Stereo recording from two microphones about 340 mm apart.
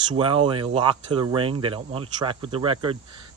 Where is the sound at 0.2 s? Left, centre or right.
Centre.